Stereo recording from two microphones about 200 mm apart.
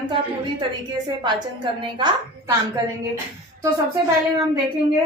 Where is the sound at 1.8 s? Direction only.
20° right (ahead or behind).